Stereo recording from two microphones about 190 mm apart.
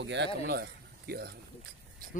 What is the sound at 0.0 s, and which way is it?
Speech, 70° right (ahead or behind).